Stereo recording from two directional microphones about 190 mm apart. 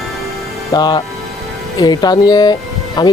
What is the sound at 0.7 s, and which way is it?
Speech, 20° left (ahead or behind).